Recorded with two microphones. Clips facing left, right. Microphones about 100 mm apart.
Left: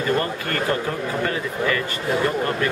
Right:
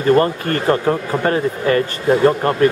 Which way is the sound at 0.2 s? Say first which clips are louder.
Right 7 dB; 40° right (ahead or behind).